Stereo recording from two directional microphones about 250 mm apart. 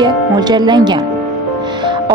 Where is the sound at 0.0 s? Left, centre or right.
Centre.